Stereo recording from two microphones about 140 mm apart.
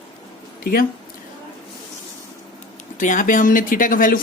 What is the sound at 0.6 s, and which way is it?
Speech, 90° left.